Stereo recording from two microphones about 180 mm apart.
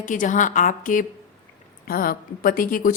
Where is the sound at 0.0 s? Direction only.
45° left (ahead or behind).